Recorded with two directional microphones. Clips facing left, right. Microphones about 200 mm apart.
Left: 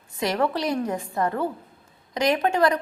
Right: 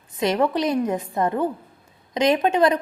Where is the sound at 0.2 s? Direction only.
20° right (ahead or behind).